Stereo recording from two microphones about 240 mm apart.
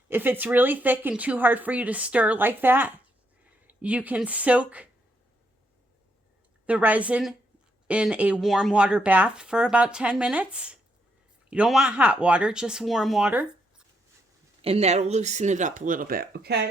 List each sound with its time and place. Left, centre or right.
0.1 s speech: centre
6.7 s speech: centre
14.6 s speech: right